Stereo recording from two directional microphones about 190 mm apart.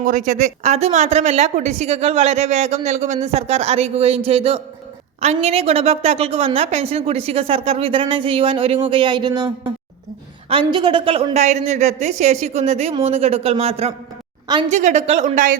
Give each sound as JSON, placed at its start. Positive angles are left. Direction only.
{"t": 0.0, "sound": "speech", "side_deg": -45}
{"t": 10.5, "sound": "speech", "side_deg": -25}